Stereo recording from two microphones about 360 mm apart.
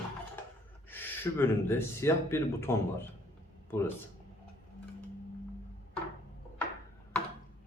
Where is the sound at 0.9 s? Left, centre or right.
Centre.